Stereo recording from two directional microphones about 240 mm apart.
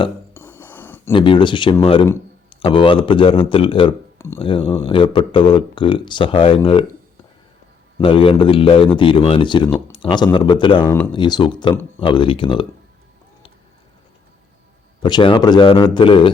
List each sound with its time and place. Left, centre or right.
0.3 s a sound: centre
1.1 s a man's voice: left
7.9 s speech: left
15.0 s speech: centre